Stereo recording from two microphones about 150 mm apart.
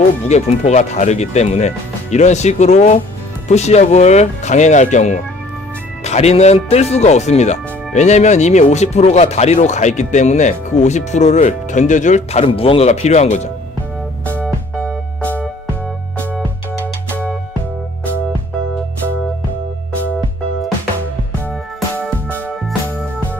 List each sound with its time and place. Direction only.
0.3 s speech: 50° left (ahead or behind)
14.4 s music: 5° left (ahead or behind)